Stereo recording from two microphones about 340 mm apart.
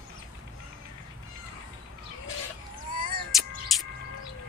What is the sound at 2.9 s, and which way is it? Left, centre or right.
Cat, right.